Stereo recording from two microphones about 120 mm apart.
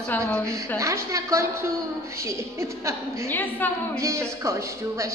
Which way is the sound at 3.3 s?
15° left (ahead or behind).